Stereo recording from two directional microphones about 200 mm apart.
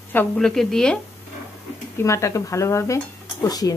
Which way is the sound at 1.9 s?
15° left (ahead or behind).